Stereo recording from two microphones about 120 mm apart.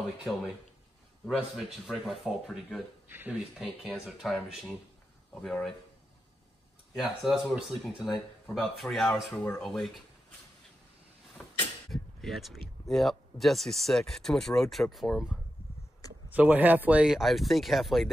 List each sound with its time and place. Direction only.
0.2 s speech: 5° right (ahead or behind)
3.1 s speech: 15° right (ahead or behind)
3.5 s speech: 5° right (ahead or behind)
6.9 s speech: 5° right (ahead or behind)
11.9 s speech: centre (ahead or behind)
16.3 s speech: 15° right (ahead or behind)